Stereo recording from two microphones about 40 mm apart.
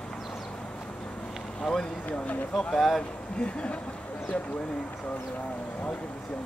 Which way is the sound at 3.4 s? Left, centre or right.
Left.